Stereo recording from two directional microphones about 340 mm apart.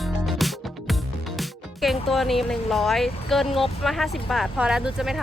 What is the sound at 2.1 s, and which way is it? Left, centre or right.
Speech, centre.